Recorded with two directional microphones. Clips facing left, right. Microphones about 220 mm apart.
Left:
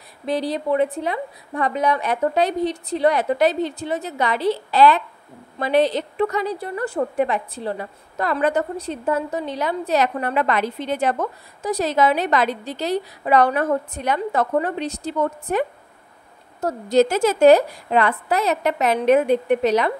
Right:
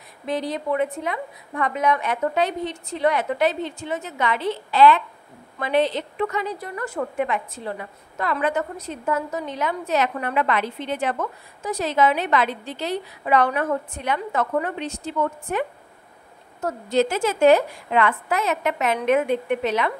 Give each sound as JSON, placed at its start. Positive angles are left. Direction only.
{"t": 0.3, "sound": "a woman's voice", "side_deg": 35}
{"t": 16.6, "sound": "a woman's voice", "side_deg": 40}